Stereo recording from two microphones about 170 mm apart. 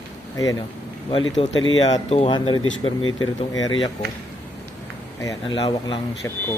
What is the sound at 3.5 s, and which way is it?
Speech, 90° left.